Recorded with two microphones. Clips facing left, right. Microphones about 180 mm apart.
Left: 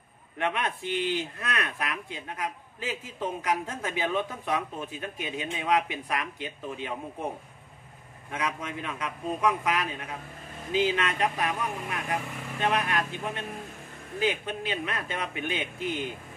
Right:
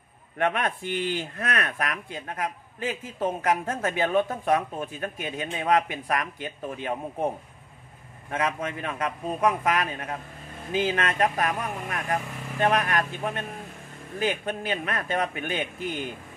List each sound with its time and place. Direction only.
0.4 s speech: 50° right (ahead or behind)
8.3 s speech: 55° right (ahead or behind)